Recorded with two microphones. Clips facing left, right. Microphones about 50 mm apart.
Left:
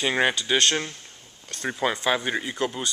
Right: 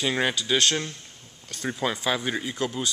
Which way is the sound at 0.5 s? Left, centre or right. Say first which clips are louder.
Right 1 dB; centre.